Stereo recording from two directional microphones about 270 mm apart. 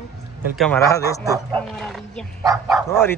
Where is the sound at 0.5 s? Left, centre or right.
Centre.